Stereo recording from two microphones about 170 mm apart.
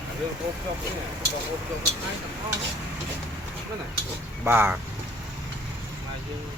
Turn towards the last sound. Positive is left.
turn(degrees=-10)  # may be behind; listen again after turning